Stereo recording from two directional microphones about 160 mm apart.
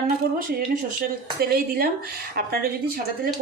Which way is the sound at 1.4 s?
70° right (ahead or behind).